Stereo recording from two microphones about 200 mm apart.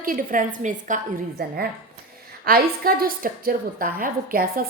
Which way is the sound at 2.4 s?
45° right (ahead or behind).